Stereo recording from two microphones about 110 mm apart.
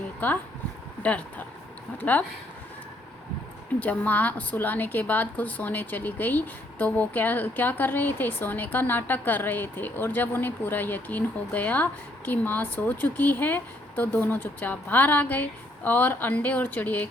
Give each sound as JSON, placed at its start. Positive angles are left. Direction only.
{"t": 1.0, "sound": "a woman's voice", "side_deg": 15}
{"t": 3.8, "sound": "a woman's voice", "side_deg": 15}